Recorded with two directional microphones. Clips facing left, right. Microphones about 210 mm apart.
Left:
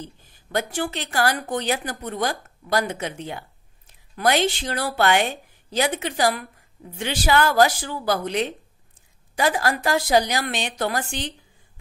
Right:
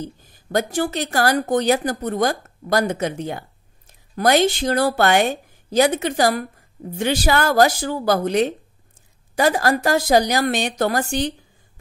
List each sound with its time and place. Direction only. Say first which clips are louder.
0.0 s speech: right 7 dB; 40° right (ahead or behind)